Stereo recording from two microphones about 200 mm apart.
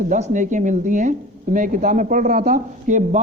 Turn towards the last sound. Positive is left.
turn(degrees=-40)  # may be behind; listen again after turning